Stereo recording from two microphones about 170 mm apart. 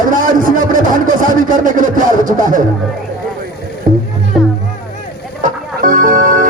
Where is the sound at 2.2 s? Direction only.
50° right (ahead or behind).